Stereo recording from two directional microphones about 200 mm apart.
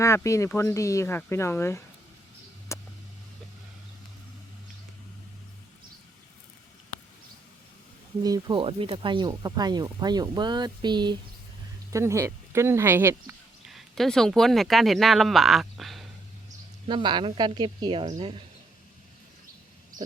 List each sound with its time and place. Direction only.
0.0 s speech: 15° left (ahead or behind)
2.7 s a sound: 15° left (ahead or behind)
8.2 s speech: 20° right (ahead or behind)
13.7 s speech: centre (ahead or behind)
16.8 s speech: 25° right (ahead or behind)